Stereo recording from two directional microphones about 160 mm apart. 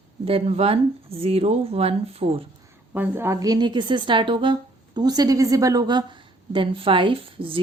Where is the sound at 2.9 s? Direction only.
15° right (ahead or behind).